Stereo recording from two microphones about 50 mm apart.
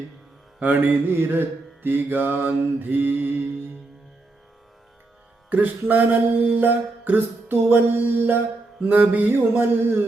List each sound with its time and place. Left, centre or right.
0.6 s mantra: right
5.5 s mantra: right
8.9 s mantra: right
9.3 s mantra: right